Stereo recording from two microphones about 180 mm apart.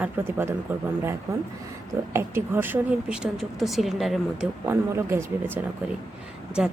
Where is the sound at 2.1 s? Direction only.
15° right (ahead or behind).